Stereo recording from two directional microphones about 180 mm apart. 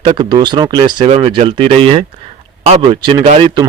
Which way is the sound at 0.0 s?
25° right (ahead or behind).